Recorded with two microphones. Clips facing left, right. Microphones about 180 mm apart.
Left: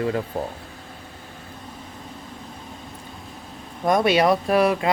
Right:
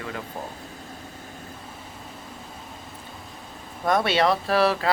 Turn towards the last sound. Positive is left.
turn(degrees=20)  # may be behind; listen again after turning